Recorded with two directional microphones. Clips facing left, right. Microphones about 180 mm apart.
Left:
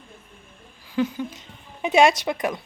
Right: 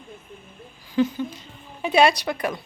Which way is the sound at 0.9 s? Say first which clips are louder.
Right 2 dB; 10° left (ahead or behind).